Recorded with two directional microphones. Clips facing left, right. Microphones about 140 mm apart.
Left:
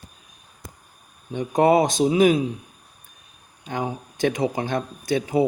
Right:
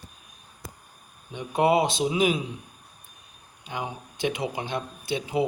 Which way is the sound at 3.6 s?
45° left (ahead or behind).